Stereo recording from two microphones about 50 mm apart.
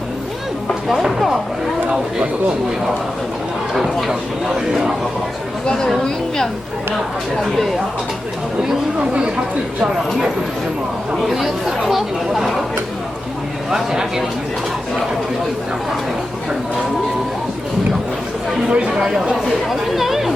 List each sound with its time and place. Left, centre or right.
0.7 s a sound: centre
3.8 s speech: centre
5.6 s a woman's voice: centre
9.0 s speech: right
11.1 s speech: centre
13.7 s speech: centre
18.7 s speech: centre
19.7 s speech: centre